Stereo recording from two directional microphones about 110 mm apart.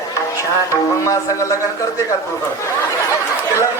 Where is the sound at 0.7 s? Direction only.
30° left (ahead or behind).